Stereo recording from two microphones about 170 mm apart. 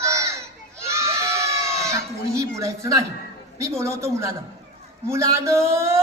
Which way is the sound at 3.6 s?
15° right (ahead or behind).